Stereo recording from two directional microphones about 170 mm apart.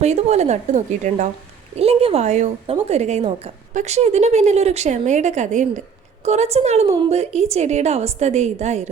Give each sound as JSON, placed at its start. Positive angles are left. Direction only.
{"t": 0.0, "sound": "a woman's voice", "side_deg": -40}